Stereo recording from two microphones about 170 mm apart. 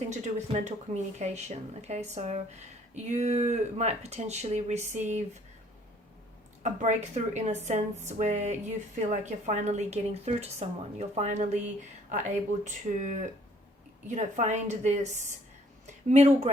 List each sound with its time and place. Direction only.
0.1 s speech: 45° right (ahead or behind)
6.6 s speech: 45° right (ahead or behind)
14.2 s speech: 45° right (ahead or behind)